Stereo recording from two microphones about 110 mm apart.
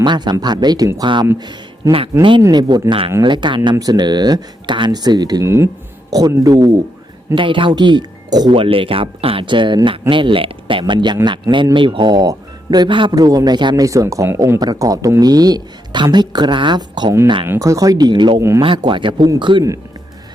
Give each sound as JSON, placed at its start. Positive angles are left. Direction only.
{"t": 0.0, "sound": "speech", "side_deg": -40}
{"t": 1.4, "sound": "a sound", "side_deg": -40}
{"t": 2.1, "sound": "speech", "side_deg": -25}
{"t": 2.5, "sound": "speech", "side_deg": -40}
{"t": 7.3, "sound": "speech", "side_deg": -50}
{"t": 8.5, "sound": "speech", "side_deg": -55}
{"t": 13.8, "sound": "speech", "side_deg": -30}
{"t": 14.6, "sound": "speech", "side_deg": -35}
{"t": 17.4, "sound": "speech", "side_deg": -30}
{"t": 18.3, "sound": "speech", "side_deg": -25}
{"t": 18.9, "sound": "speech", "side_deg": -50}